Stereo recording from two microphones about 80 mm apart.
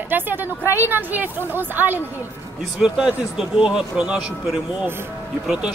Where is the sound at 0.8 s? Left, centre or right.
Right.